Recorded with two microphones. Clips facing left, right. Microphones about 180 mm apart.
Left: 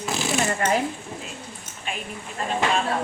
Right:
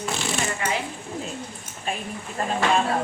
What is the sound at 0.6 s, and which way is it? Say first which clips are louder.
Speech: left 5 dB; 50° left (ahead or behind).